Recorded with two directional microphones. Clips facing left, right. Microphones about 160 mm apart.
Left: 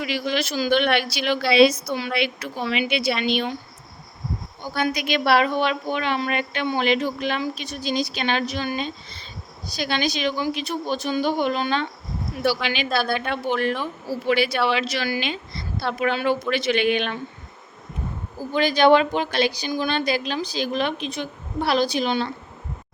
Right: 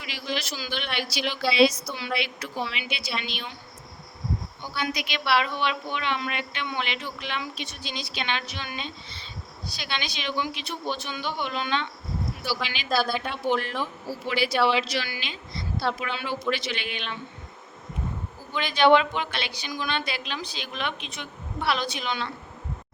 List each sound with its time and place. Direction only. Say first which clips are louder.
0.0 s a woman's voice: left 8 dB; 60° left (ahead or behind)
4.7 s a woman's voice: left 7 dB; 45° left (ahead or behind)
12.6 s a woman's voice: left 3 dB; 65° left (ahead or behind)
18.3 s a woman's voice: left 6 dB; 40° left (ahead or behind)